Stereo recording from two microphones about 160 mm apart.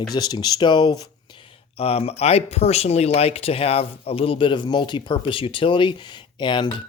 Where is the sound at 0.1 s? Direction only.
25° left (ahead or behind).